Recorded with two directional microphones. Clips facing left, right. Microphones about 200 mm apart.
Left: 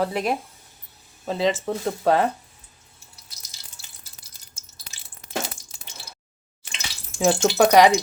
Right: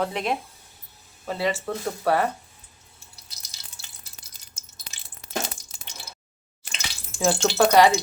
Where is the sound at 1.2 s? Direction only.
20° left (ahead or behind).